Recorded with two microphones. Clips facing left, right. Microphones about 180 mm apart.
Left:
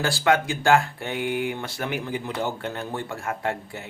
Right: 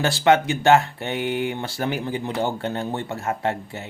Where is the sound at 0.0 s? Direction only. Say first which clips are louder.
Right 4 dB; 25° right (ahead or behind).